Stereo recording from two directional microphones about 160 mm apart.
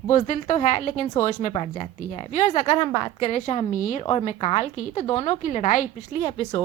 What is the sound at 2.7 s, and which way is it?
Speech, 25° left (ahead or behind).